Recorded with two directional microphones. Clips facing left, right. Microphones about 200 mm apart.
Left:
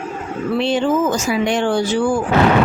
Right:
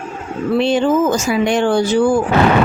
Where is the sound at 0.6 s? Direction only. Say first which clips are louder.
Right 2 dB; 45° right (ahead or behind).